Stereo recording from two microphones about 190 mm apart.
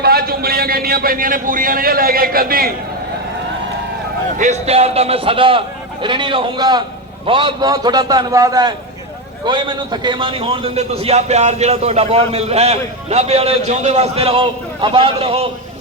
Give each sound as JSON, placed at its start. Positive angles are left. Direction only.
{"t": 0.0, "sound": "a man's voice", "side_deg": -55}
{"t": 4.4, "sound": "a man's voice", "side_deg": -35}